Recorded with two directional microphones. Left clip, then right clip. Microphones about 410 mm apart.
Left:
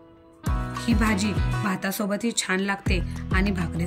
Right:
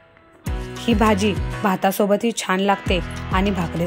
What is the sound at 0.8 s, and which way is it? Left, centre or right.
Speech, centre.